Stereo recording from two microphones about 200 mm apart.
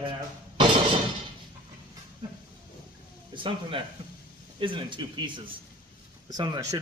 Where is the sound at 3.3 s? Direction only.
25° right (ahead or behind).